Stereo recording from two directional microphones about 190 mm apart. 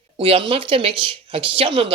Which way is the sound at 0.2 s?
30° right (ahead or behind).